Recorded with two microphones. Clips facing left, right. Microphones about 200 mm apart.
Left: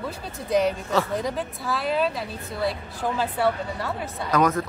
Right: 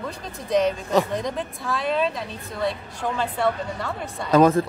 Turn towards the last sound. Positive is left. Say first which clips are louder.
# right 5 dB
turn(degrees=-30)  # may be behind; listen again after turning